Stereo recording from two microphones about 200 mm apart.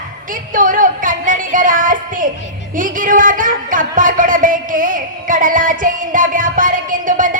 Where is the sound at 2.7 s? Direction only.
40° right (ahead or behind).